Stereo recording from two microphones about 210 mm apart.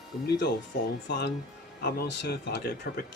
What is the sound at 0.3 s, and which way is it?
Speech, 50° left (ahead or behind).